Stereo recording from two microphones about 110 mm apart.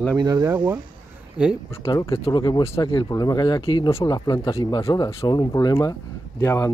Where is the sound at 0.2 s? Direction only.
30° right (ahead or behind).